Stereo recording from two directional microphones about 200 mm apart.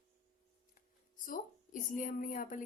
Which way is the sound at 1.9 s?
40° left (ahead or behind).